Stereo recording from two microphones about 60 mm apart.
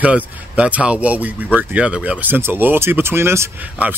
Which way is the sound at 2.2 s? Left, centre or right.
Right.